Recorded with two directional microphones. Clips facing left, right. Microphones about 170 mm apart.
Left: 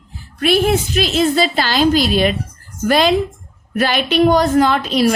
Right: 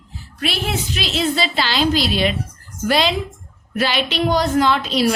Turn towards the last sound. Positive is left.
turn(degrees=50)  # may be behind; listen again after turning